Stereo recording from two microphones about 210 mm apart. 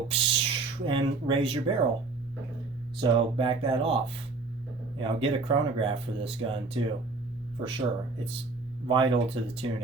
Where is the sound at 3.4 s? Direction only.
25° right (ahead or behind).